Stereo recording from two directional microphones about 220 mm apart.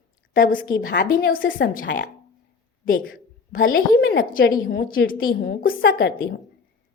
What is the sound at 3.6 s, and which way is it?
Speech, 40° left (ahead or behind).